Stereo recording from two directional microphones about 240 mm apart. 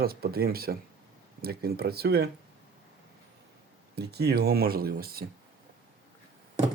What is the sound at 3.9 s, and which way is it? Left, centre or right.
Speech, right.